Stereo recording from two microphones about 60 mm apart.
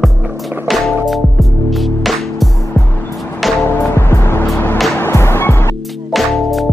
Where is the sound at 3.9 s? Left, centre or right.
Left.